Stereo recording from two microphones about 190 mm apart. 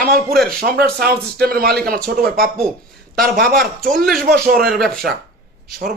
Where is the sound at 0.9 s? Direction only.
55° right (ahead or behind).